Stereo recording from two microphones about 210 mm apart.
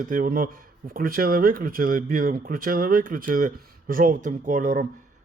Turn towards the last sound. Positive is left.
turn(degrees=-40)  # may be behind; listen again after turning